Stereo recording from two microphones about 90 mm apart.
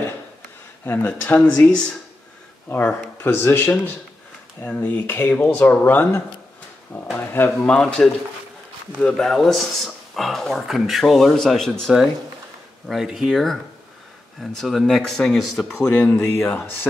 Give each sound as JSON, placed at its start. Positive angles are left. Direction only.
{"t": 0.8, "sound": "speech", "side_deg": 25}
{"t": 9.1, "sound": "speech", "side_deg": 0}
{"t": 12.8, "sound": "speech", "side_deg": 0}
{"t": 16.3, "sound": "speech", "side_deg": 25}